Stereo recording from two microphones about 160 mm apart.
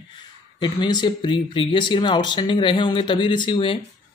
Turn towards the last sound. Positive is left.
turn(degrees=30)  # may be behind; listen again after turning